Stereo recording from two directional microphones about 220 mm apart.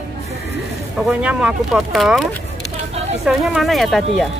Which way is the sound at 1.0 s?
5° right (ahead or behind).